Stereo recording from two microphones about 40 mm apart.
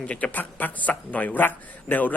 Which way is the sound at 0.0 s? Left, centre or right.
Left.